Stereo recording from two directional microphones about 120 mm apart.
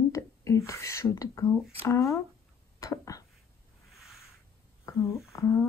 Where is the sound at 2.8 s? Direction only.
30° left (ahead or behind).